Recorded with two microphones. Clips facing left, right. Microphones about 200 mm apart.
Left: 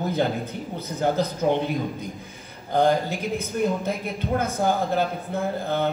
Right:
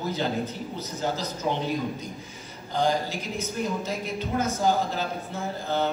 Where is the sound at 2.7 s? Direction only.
55° left (ahead or behind).